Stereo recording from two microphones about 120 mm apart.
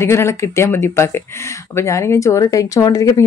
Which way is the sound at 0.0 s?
20° left (ahead or behind).